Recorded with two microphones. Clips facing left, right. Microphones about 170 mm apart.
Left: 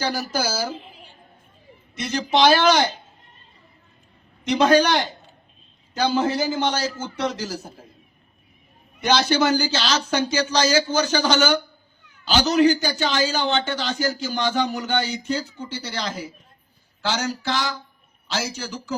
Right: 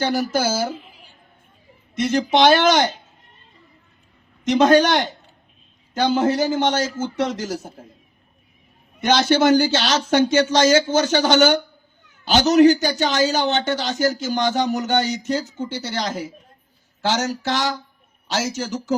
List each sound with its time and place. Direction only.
0.0 s speech: 25° right (ahead or behind)
0.7 s a sound: 25° left (ahead or behind)
2.0 s a man's voice: 50° right (ahead or behind)
4.4 s a man's voice: 45° right (ahead or behind)
9.0 s a man's voice: 50° right (ahead or behind)